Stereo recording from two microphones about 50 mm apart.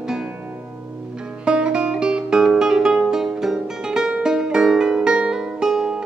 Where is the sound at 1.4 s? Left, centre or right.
Right.